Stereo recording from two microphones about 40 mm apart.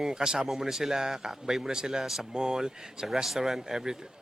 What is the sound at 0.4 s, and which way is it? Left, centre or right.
Speech, centre.